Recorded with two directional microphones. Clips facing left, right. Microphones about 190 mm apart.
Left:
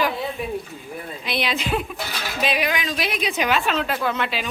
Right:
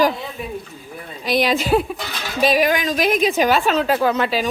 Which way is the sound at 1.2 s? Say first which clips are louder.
Right 8 dB; 40° right (ahead or behind).